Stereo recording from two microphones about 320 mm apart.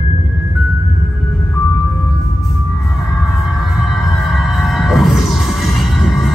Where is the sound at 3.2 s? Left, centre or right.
Centre.